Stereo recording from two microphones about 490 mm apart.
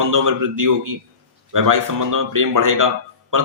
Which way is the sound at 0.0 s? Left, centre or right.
Right.